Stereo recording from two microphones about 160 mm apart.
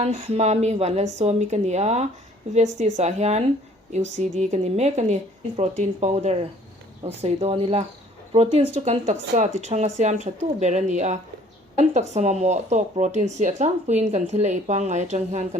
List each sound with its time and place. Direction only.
0.0 s speech: 40° right (ahead or behind)